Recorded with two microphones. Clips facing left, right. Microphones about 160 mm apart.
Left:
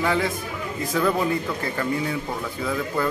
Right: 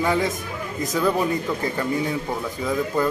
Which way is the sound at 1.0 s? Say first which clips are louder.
Right 1 dB; 10° right (ahead or behind).